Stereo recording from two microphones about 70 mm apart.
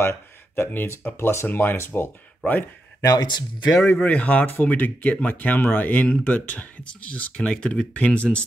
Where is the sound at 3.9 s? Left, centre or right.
Left.